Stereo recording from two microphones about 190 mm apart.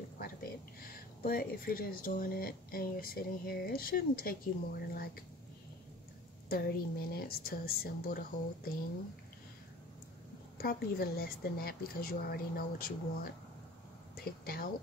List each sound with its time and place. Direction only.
0.2 s speech: 50° left (ahead or behind)
6.5 s speech: 55° left (ahead or behind)
10.6 s speech: 50° left (ahead or behind)